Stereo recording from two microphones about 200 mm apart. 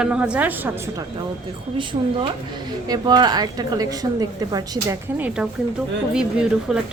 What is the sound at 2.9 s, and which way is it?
A woman's voice, 20° right (ahead or behind).